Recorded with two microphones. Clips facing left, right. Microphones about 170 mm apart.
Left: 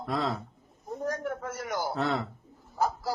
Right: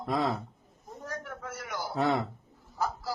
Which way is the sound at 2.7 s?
45° left (ahead or behind).